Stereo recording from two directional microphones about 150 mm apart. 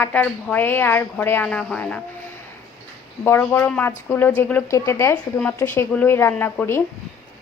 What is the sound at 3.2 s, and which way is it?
A woman's voice, 15° left (ahead or behind).